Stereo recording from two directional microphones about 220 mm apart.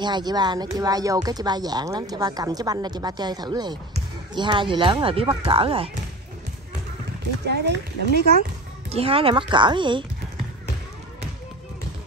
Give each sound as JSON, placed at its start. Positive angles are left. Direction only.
{"t": 0.0, "sound": "speech", "side_deg": -20}
{"t": 7.4, "sound": "speech", "side_deg": -50}
{"t": 8.9, "sound": "speech", "side_deg": -25}